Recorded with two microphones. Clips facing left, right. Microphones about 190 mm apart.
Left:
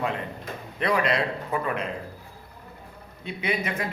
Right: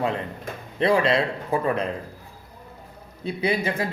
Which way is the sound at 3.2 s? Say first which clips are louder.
Right 5 dB; 35° right (ahead or behind).